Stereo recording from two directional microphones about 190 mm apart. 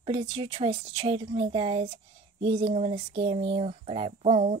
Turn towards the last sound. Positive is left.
turn(degrees=-35)  # may be behind; listen again after turning